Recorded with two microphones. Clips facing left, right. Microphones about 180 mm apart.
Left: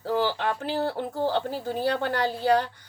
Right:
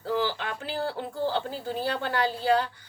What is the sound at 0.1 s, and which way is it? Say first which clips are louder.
A woman's voice: left 3 dB; 45° left (ahead or behind).